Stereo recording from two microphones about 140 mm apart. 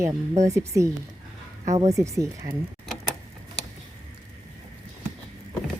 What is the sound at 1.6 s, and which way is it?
Speech, 55° right (ahead or behind).